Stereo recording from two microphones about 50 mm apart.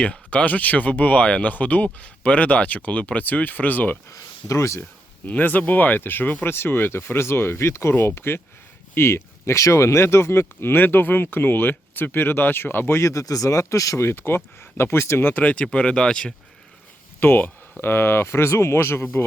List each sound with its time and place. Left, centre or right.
0.0 s speech: left
4.1 s speech: left
5.2 s speech: left
6.5 s speech: left
13.0 s speech: left
15.2 s speech: left; by 16.3 s centre
17.2 s speech: left